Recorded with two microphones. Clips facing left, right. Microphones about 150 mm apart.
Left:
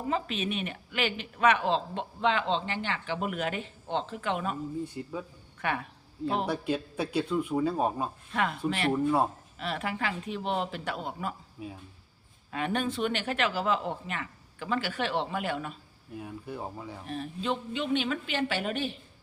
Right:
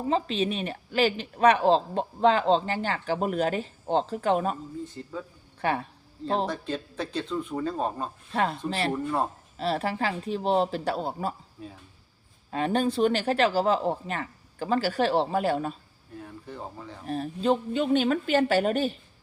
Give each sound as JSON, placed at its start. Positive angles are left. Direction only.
{"t": 0.1, "sound": "a woman's voice", "side_deg": -30}
{"t": 5.0, "sound": "speech", "side_deg": 15}
{"t": 5.5, "sound": "speech", "side_deg": -35}
{"t": 6.4, "sound": "speech", "side_deg": 10}
{"t": 8.3, "sound": "a woman's voice", "side_deg": -35}
{"t": 8.9, "sound": "speech", "side_deg": 5}
{"t": 9.6, "sound": "a woman's voice", "side_deg": -35}
{"t": 11.6, "sound": "speech", "side_deg": 10}
{"t": 12.5, "sound": "a woman's voice", "side_deg": -35}
{"t": 16.1, "sound": "speech", "side_deg": 10}
{"t": 17.1, "sound": "a woman's voice", "side_deg": -40}